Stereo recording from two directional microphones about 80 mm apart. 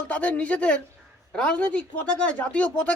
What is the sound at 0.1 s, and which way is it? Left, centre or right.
Speech, centre.